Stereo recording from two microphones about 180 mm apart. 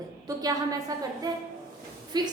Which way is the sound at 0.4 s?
20° right (ahead or behind).